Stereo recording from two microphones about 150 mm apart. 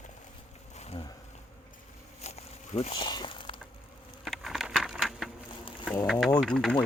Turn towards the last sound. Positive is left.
turn(degrees=5)  # may be behind; listen again after turning